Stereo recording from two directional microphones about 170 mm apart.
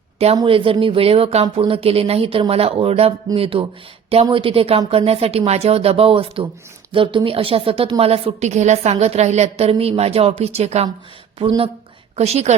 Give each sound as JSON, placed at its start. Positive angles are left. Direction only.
{"t": 0.3, "sound": "a woman's voice", "side_deg": -30}